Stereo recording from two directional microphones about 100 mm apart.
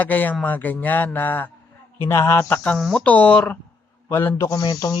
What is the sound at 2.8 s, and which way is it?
Speech, centre (ahead or behind).